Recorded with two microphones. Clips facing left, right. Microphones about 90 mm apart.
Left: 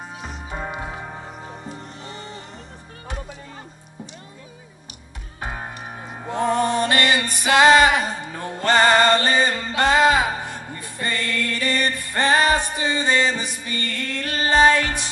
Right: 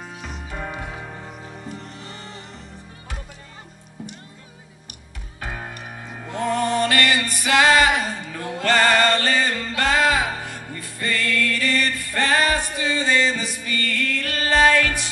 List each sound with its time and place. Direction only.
0.0 s music: 25° left (ahead or behind)
5.4 s music: 25° left (ahead or behind)